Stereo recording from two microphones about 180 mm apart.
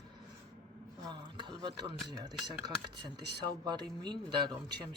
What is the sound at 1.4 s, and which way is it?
Speech, 25° right (ahead or behind).